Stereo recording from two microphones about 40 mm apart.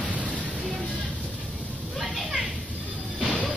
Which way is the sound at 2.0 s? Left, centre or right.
Centre.